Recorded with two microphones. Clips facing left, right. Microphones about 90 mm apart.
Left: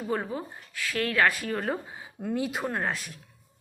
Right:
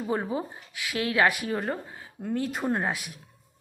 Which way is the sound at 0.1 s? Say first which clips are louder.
Right 2 dB; 15° right (ahead or behind).